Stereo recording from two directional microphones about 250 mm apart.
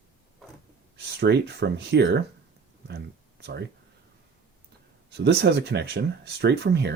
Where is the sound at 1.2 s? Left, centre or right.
Right.